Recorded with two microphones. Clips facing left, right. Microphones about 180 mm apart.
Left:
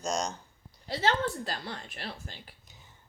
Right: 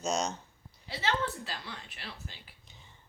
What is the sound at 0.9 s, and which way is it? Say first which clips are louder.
Speech: left 4 dB; 45° left (ahead or behind).